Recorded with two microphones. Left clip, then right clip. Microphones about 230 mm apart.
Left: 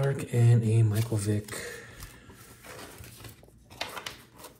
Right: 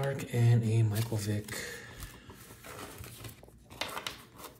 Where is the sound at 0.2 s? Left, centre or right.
Centre.